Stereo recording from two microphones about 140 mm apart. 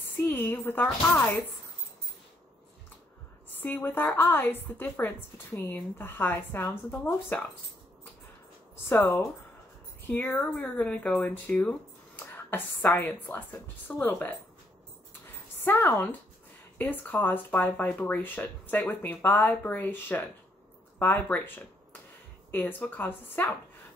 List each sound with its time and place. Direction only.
0.2 s speech: 15° left (ahead or behind)
3.5 s speech: 10° left (ahead or behind)
8.8 s speech: 15° left (ahead or behind)
12.2 s a sound: 15° left (ahead or behind)
12.8 s speech: 10° left (ahead or behind)
15.6 s speech: 15° left (ahead or behind)